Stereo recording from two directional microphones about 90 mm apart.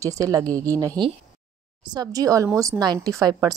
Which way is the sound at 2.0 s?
40° right (ahead or behind).